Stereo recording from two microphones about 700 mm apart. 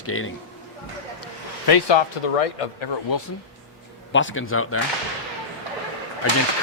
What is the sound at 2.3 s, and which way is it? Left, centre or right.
Speech, left.